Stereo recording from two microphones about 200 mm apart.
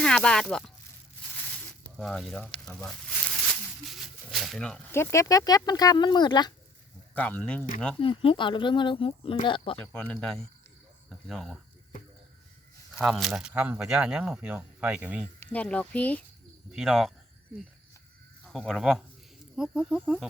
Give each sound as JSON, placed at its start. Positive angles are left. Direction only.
{"t": 0.0, "sound": "speech", "side_deg": 5}
{"t": 2.0, "sound": "speech", "side_deg": 0}
{"t": 7.1, "sound": "speech", "side_deg": 10}
{"t": 8.0, "sound": "speech", "side_deg": 25}
{"t": 9.9, "sound": "speech", "side_deg": 5}
{"t": 13.0, "sound": "speech", "side_deg": 0}
{"t": 15.5, "sound": "speech", "side_deg": 5}
{"t": 18.4, "sound": "speech", "side_deg": 0}